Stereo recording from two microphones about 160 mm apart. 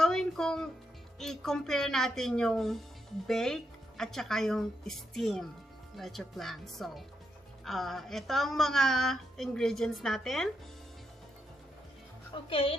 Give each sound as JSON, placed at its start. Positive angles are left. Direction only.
{"t": 0.0, "sound": "music", "side_deg": 5}
{"t": 1.2, "sound": "speech", "side_deg": 0}
{"t": 12.3, "sound": "a woman's voice", "side_deg": 35}